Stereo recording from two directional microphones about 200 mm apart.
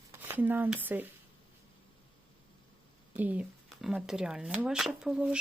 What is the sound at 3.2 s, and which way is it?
Speech, 5° right (ahead or behind).